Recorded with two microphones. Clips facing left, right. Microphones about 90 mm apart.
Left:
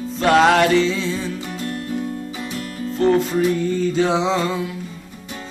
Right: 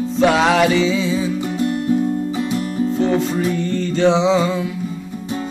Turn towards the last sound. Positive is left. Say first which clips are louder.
# right 4 dB
turn(degrees=0)  # may be behind; listen again after turning